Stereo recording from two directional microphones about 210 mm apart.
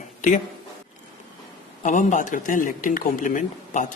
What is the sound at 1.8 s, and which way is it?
Speech, 35° left (ahead or behind).